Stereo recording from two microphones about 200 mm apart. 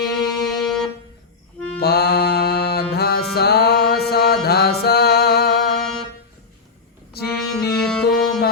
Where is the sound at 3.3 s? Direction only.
55° left (ahead or behind).